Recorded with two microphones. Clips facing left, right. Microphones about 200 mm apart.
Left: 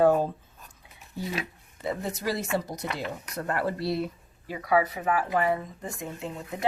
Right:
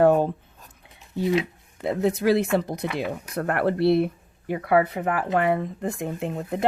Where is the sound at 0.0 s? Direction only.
65° right (ahead or behind).